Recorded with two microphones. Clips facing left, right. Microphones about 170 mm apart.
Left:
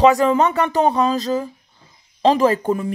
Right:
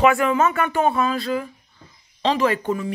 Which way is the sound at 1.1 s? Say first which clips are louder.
Left 3 dB; 40° left (ahead or behind).